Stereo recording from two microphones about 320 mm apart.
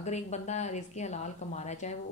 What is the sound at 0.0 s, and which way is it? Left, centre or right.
A woman's voice, left.